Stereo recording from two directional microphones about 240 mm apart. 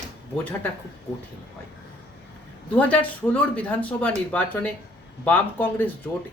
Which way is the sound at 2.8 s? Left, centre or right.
Centre.